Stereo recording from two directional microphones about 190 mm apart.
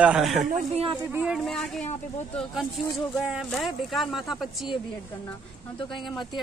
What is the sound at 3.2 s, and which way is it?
Speech, 5° right (ahead or behind).